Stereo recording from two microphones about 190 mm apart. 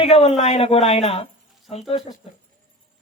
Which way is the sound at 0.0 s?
35° left (ahead or behind).